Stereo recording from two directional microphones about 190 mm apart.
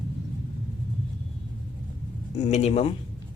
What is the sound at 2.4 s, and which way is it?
Speech, 35° left (ahead or behind).